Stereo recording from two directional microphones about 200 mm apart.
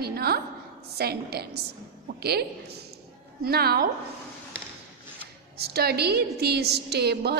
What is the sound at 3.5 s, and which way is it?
Speech, 50° right (ahead or behind).